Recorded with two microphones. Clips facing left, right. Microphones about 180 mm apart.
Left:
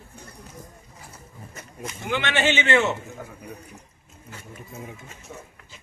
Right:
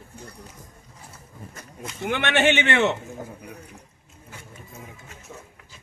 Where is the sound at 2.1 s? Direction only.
60° right (ahead or behind).